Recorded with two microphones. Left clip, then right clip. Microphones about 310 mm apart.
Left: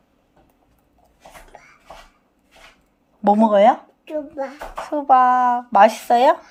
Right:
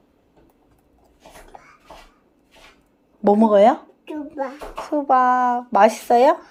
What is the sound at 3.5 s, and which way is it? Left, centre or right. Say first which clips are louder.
Speech: right 1 dB; left.